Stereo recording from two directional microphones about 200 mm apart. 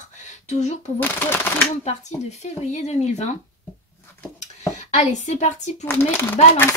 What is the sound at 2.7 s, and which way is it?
Speech, 35° left (ahead or behind).